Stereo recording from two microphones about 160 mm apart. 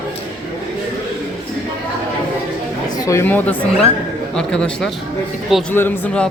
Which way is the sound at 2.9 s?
20° left (ahead or behind).